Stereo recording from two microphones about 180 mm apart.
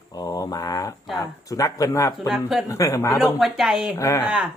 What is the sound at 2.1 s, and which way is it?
Speech, centre (ahead or behind).